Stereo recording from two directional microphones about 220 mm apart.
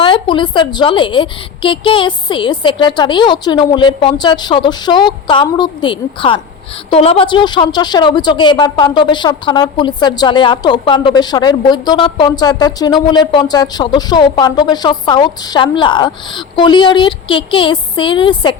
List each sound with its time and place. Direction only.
0.0 s a woman's voice: 20° left (ahead or behind)